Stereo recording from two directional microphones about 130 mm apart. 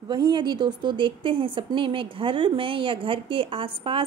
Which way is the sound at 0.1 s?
35° right (ahead or behind).